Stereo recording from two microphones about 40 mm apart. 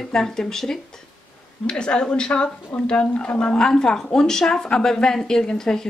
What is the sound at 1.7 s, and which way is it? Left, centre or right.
Speech, left.